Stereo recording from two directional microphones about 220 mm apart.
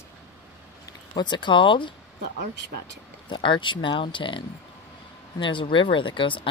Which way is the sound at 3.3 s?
20° left (ahead or behind).